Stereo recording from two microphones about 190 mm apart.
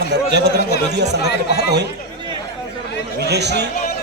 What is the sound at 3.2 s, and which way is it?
Speech, 60° right (ahead or behind).